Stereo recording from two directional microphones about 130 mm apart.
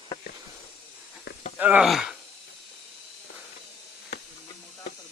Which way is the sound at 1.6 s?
10° right (ahead or behind).